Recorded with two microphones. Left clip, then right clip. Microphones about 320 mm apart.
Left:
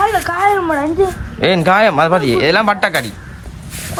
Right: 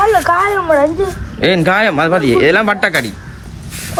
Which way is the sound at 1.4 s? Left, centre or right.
Centre.